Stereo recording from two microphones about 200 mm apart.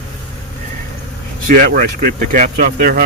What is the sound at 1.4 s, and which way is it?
Speech, 45° right (ahead or behind).